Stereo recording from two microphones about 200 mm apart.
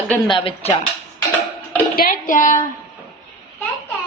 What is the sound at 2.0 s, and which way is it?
Speech, 45° left (ahead or behind).